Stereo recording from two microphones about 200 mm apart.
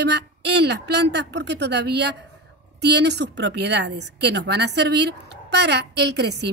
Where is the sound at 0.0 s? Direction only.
55° right (ahead or behind).